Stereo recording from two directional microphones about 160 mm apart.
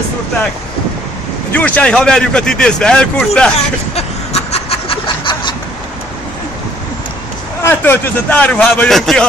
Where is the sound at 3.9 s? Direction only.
40° left (ahead or behind).